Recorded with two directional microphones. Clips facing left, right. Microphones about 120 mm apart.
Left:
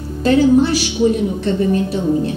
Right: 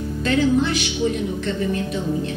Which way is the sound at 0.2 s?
35° left (ahead or behind).